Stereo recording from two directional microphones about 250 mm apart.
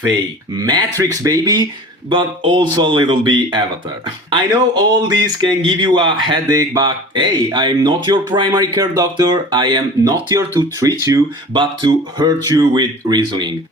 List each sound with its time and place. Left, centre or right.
0.6 s speech: centre